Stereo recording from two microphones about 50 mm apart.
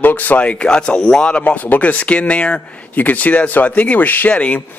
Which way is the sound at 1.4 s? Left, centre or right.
Left.